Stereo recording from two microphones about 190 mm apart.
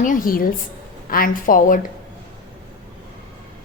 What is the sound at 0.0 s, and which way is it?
A woman's voice, 45° left (ahead or behind).